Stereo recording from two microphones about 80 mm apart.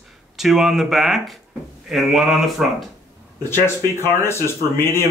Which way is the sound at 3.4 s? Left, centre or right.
Left.